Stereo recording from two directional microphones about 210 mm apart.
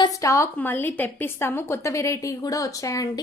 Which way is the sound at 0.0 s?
15° left (ahead or behind).